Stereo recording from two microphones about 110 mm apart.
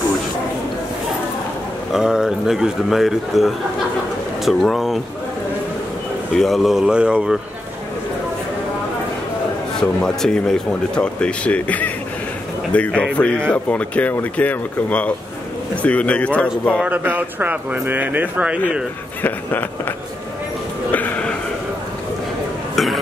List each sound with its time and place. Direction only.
1.9 s speech: 5° right (ahead or behind)
6.3 s speech: centre (ahead or behind)
9.8 s speech: 5° left (ahead or behind)
16.8 s speech: 15° right (ahead or behind)
19.2 s speech: 15° left (ahead or behind)
20.9 s a sound: 10° left (ahead or behind)